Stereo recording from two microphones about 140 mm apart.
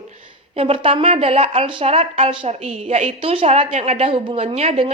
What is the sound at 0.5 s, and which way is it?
A woman's voice, 45° right (ahead or behind).